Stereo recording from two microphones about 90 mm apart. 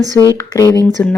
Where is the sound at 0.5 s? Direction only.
40° left (ahead or behind).